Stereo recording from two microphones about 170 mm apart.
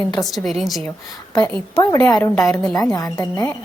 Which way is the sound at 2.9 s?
20° left (ahead or behind).